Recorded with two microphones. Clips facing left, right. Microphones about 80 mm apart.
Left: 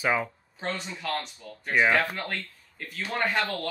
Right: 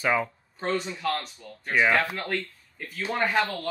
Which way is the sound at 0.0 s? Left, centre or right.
Centre.